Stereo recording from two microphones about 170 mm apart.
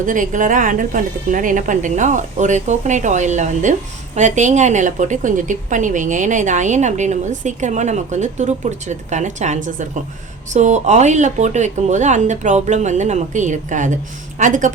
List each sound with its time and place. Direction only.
0.0 s a woman's voice: 50° right (ahead or behind)